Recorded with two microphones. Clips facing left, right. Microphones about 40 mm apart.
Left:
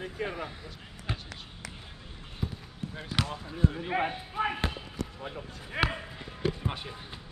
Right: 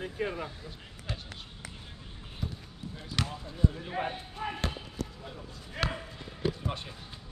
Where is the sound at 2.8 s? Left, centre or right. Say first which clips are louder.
Left 4 dB; left.